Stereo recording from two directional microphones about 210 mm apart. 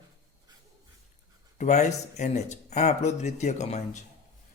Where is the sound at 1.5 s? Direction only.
35° left (ahead or behind).